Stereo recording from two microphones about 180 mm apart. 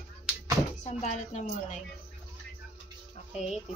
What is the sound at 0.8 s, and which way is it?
Speech, 40° left (ahead or behind).